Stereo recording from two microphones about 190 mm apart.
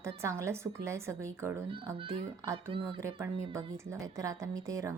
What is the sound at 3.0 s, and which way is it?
A woman's voice, 15° right (ahead or behind).